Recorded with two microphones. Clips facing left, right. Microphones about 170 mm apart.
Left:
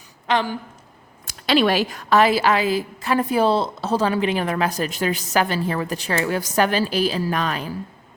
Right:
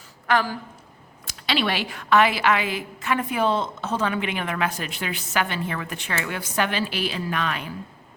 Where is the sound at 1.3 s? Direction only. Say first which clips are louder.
Left 7 dB; 45° left (ahead or behind).